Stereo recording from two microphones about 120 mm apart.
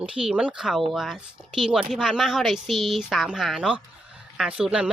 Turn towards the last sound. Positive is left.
turn(degrees=-10)  # may be behind; listen again after turning